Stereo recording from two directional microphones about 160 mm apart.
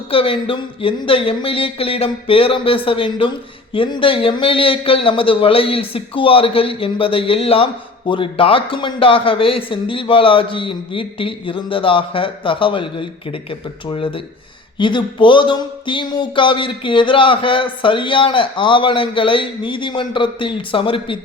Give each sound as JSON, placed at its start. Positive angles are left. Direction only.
{"t": 0.1, "sound": "speech", "side_deg": 35}